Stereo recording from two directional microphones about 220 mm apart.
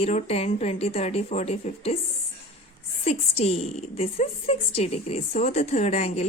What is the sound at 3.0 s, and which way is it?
A woman's voice, 30° left (ahead or behind).